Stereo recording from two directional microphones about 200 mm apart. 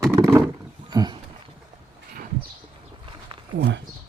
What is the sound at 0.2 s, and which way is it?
Roaring cats, 15° right (ahead or behind).